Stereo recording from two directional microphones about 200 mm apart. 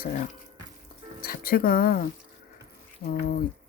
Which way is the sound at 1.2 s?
50° left (ahead or behind).